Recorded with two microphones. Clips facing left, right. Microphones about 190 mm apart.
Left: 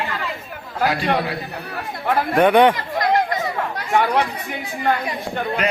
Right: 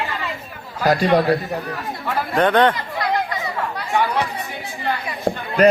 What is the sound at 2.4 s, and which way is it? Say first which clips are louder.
Speech: left 2 dB; 10° left (ahead or behind).